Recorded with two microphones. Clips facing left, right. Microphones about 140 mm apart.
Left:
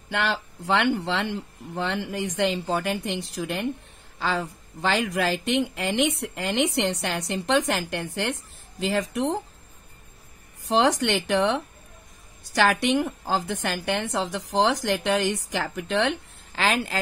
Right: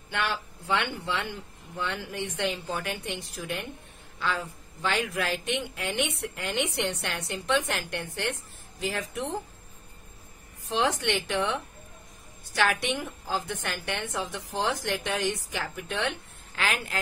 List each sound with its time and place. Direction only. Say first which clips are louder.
0.1 s a woman's voice: left 4 dB; 90° left
10.6 s a woman's voice: left 6 dB; 90° left